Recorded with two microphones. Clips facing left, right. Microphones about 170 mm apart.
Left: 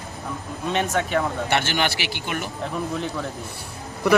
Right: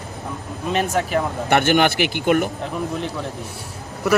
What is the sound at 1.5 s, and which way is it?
Speech, 55° right (ahead or behind).